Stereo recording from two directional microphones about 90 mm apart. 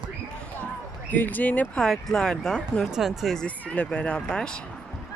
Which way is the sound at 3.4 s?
15° left (ahead or behind).